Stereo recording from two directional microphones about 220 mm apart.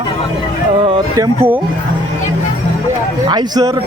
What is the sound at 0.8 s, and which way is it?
Music, 20° right (ahead or behind).